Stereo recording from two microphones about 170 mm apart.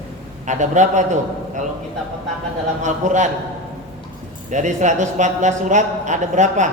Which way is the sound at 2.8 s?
45° right (ahead or behind).